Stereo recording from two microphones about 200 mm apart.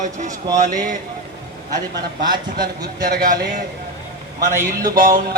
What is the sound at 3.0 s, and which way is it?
Speech, 45° right (ahead or behind).